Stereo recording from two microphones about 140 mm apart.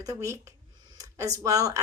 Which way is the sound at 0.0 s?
20° right (ahead or behind).